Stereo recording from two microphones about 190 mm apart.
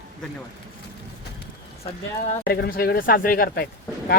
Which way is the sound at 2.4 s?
55° left (ahead or behind).